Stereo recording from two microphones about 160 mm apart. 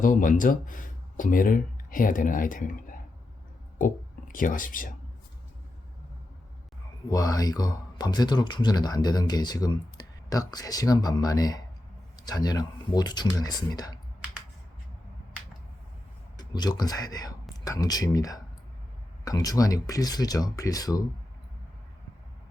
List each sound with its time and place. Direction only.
0.0 s speech: 55° left (ahead or behind)
3.8 s speech: 55° left (ahead or behind)
7.1 s speech: 20° left (ahead or behind)
16.4 s speech: 25° left (ahead or behind)